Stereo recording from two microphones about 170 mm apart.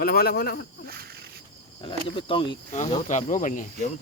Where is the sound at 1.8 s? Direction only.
30° left (ahead or behind).